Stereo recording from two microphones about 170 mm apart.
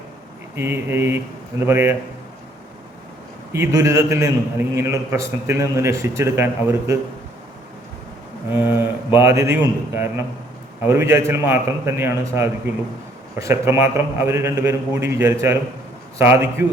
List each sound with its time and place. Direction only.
0.5 s a man's voice: 15° right (ahead or behind)
3.5 s a man's voice: 15° right (ahead or behind)
8.4 s a sound: 10° right (ahead or behind)
9.1 s a man's voice: 15° right (ahead or behind)